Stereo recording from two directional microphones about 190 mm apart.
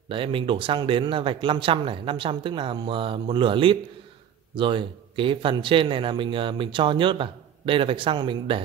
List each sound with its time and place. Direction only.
0.1 s speech: 25° right (ahead or behind)